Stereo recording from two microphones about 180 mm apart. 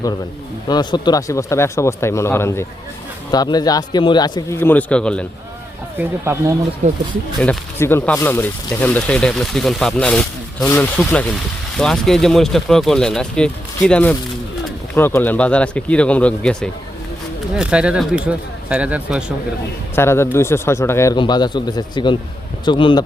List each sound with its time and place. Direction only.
0.7 s speech: 25° left (ahead or behind); by 5.2 s 5° left (ahead or behind)
6.0 s speech: 15° right (ahead or behind)
6.8 s speech: 40° right (ahead or behind)
7.4 s speech: 15° left (ahead or behind)
17.6 s speech: 5° right (ahead or behind)
20.0 s speech: 15° left (ahead or behind)